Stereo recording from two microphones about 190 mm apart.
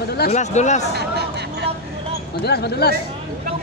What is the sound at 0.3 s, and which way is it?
Speech, 35° left (ahead or behind).